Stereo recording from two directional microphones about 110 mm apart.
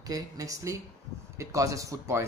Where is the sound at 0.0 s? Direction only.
30° right (ahead or behind).